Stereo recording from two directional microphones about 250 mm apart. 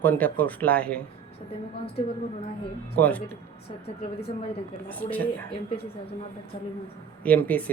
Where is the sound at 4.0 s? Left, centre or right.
Left.